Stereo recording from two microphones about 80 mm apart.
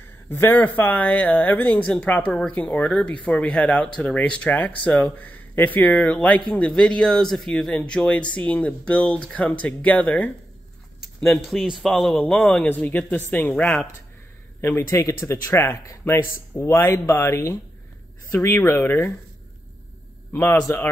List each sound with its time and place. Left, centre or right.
0.3 s speech: left
11.4 s a man's voice: centre
12.6 s speech: left
14.8 s speech: left
20.7 s speech: left